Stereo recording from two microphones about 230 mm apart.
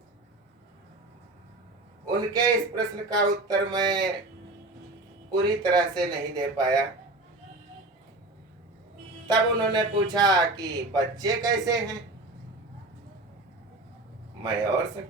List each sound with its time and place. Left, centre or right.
2.0 s speech: centre
5.3 s speech: centre
9.2 s speech: centre